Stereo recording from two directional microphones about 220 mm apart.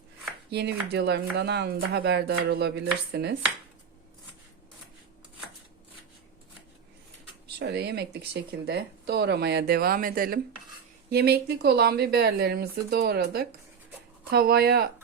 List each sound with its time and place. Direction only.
0.5 s speech: 50° right (ahead or behind)
7.6 s speech: 50° right (ahead or behind)